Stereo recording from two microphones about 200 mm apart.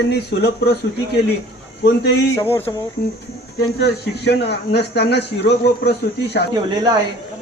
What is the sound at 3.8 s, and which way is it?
A man's voice, 55° left (ahead or behind).